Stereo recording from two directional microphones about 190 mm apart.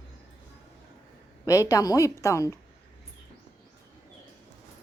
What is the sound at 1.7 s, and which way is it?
Speech, 20° left (ahead or behind).